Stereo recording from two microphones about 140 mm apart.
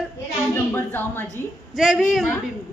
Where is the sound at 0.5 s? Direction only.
15° left (ahead or behind).